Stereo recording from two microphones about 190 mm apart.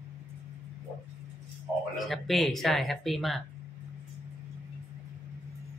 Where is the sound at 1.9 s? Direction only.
Centre (ahead or behind).